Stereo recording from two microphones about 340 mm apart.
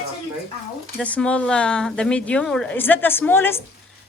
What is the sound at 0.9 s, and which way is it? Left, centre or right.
Speech, centre.